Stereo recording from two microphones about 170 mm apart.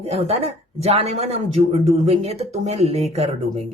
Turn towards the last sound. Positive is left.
turn(degrees=-40)  # may be behind; listen again after turning